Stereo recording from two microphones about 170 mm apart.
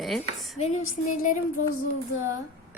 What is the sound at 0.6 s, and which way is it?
Speech, 40° left (ahead or behind).